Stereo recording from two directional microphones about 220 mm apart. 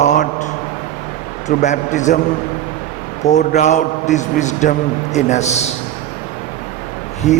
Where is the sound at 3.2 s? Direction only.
30° left (ahead or behind).